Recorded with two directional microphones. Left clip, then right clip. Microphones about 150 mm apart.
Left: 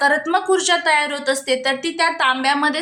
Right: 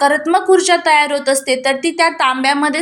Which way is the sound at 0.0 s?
20° right (ahead or behind).